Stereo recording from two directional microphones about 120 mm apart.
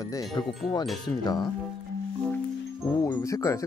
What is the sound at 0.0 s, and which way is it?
Music, 30° left (ahead or behind).